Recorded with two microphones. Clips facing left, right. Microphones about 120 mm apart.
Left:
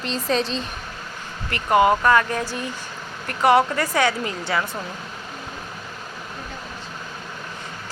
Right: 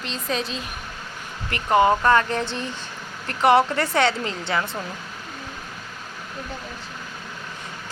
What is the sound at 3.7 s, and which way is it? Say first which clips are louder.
Speech: even; 25° right (ahead or behind).